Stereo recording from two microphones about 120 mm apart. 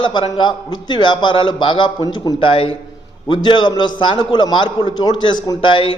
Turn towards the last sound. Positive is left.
turn(degrees=45)  # may be behind; listen again after turning